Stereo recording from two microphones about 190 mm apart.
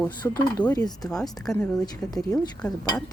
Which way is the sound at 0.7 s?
20° left (ahead or behind).